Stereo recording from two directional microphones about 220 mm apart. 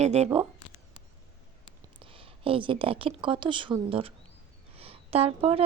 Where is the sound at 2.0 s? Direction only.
25° right (ahead or behind).